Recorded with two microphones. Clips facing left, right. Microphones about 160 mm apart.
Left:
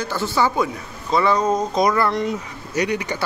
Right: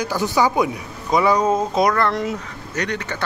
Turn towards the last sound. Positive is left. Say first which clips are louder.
# left 3 dB
turn(degrees=10)  # may be behind; listen again after turning